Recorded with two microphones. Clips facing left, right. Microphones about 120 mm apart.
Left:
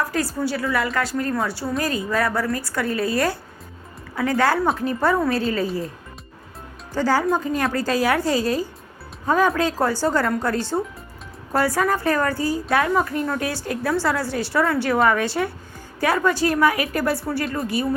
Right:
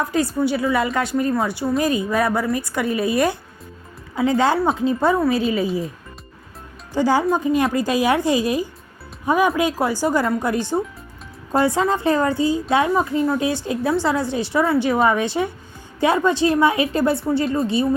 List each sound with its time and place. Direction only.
0.0 s a woman's voice: 20° right (ahead or behind)
6.9 s a woman's voice: 20° right (ahead or behind)